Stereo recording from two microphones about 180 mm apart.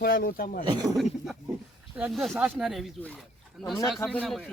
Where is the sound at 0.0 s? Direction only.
60° left (ahead or behind).